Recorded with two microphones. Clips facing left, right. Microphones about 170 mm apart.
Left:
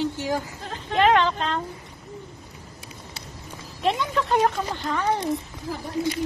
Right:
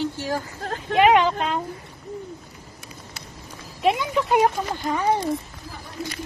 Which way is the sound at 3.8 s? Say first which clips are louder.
Right 2 dB; 10° right (ahead or behind).